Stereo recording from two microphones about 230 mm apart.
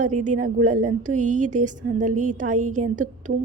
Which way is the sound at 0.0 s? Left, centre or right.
Right.